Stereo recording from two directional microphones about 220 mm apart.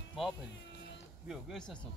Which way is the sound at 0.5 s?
55° left (ahead or behind).